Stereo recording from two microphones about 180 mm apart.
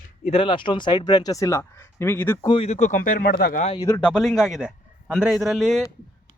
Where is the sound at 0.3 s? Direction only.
30° left (ahead or behind); by 2.5 s 15° left (ahead or behind).